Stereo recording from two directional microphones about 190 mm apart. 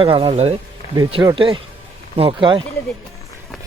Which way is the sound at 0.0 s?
30° right (ahead or behind).